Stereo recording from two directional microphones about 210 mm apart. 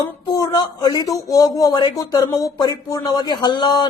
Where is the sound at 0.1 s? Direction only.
15° left (ahead or behind).